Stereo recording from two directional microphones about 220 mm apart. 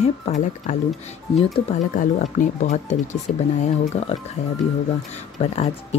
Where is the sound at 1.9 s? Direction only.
35° left (ahead or behind).